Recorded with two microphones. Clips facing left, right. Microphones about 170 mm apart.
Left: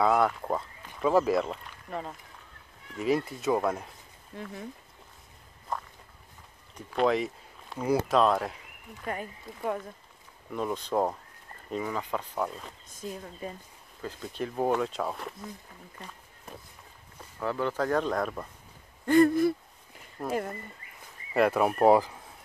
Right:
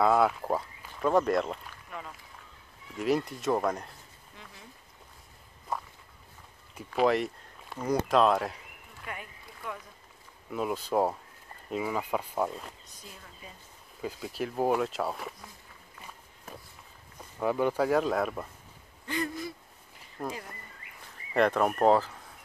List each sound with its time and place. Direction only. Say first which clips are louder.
0.0 s speech: even; centre (ahead or behind)
1.9 s speech: left 6 dB; 40° left (ahead or behind)
3.0 s speech: left 1 dB; centre (ahead or behind)
6.7 s speech: even; 5° right (ahead or behind)
9.0 s speech: left 7 dB; 40° left (ahead or behind)
10.5 s speech: even; 5° right (ahead or behind)
12.8 s speech: left 11 dB; 45° left (ahead or behind)
14.0 s speech: right 1 dB; 5° right (ahead or behind)
17.4 s speech: right 3 dB; 15° right (ahead or behind)
19.0 s speech: left 13 dB; 50° left (ahead or behind)
20.2 s speech: left 6 dB; centre (ahead or behind)